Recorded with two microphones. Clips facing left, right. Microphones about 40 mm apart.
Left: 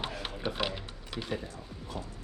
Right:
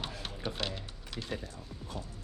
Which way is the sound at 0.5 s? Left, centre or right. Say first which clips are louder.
Left 4 dB; centre.